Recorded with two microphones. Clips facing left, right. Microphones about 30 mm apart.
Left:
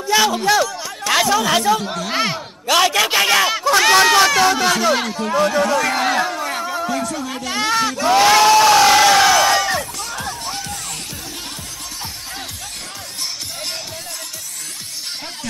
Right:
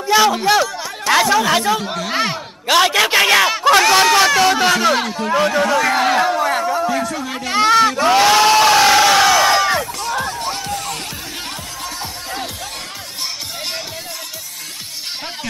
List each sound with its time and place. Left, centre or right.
0.1 s speech: centre
2.7 s speech: right
3.9 s speech: centre
4.5 s speech: centre
4.9 s speech: centre
5.5 s a sound: centre
6.9 s speech: centre
7.6 s a sound: right
8.5 s crowd: right
8.7 s crowd: centre
9.5 s music: right
12.0 s music: centre